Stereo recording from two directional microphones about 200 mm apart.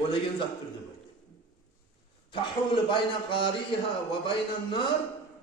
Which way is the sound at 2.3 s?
25° left (ahead or behind).